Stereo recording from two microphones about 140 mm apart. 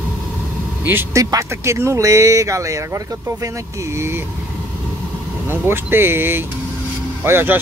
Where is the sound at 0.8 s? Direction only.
20° right (ahead or behind).